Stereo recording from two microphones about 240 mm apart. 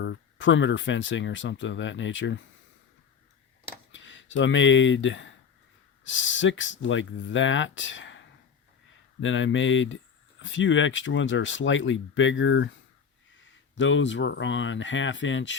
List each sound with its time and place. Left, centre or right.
0.0 s speech: left
3.9 s speech: left
9.2 s speech: left
13.7 s speech: left